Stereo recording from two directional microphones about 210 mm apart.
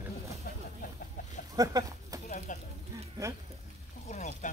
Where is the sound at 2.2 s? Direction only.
35° left (ahead or behind).